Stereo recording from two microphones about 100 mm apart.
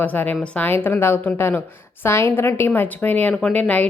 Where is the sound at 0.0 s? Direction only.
15° left (ahead or behind).